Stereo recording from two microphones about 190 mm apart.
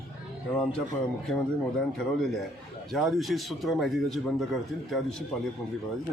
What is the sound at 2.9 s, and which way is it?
Speech, centre (ahead or behind).